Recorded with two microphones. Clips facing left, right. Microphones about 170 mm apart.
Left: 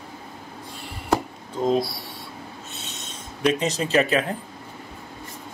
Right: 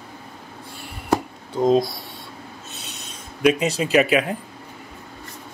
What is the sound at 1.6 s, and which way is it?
Speech, 20° right (ahead or behind).